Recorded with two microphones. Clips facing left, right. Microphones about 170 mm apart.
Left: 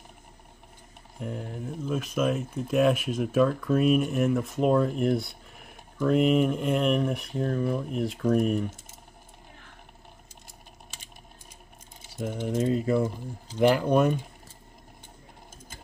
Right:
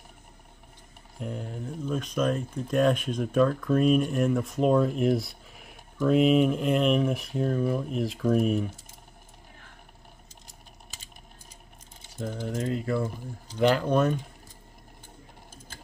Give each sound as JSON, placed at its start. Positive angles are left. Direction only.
{"t": 1.2, "sound": "speech", "side_deg": 0}
{"t": 12.2, "sound": "speech", "side_deg": 15}